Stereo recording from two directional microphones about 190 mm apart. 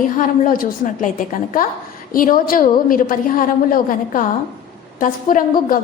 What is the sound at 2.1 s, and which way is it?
A woman's voice, 45° left (ahead or behind).